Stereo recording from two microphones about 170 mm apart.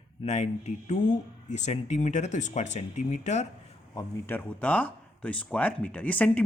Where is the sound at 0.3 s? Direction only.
40° left (ahead or behind).